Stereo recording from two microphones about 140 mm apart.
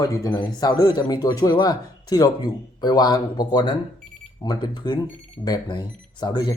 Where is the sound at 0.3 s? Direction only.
30° left (ahead or behind).